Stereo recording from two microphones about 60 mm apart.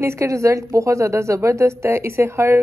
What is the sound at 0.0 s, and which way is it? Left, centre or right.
Speech, right.